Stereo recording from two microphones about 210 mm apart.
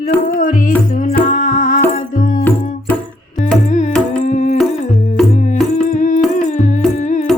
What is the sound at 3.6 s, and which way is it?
Music, 35° left (ahead or behind).